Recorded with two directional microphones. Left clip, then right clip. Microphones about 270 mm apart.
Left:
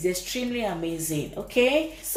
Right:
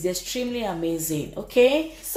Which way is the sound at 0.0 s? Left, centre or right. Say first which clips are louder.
Right 1 dB; right.